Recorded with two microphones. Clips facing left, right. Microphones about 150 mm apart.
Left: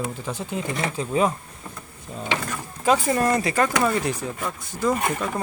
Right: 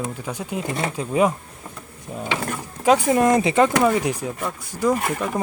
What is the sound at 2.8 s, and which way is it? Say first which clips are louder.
Speech: right 4 dB; 15° right (ahead or behind).